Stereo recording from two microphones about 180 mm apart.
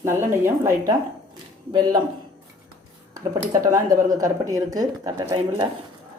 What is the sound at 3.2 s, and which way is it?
A woman's voice, 20° right (ahead or behind).